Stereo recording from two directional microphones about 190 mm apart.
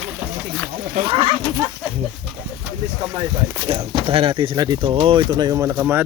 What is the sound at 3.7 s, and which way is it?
Speech, 30° right (ahead or behind).